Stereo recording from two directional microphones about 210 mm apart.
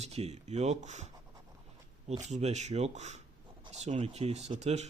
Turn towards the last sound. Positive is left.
turn(degrees=-30)  # may be behind; listen again after turning